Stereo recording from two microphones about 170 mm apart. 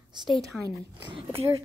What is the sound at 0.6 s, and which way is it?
Speech, 25° right (ahead or behind).